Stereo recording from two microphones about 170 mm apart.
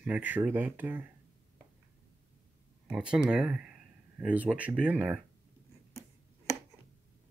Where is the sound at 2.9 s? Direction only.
5° right (ahead or behind).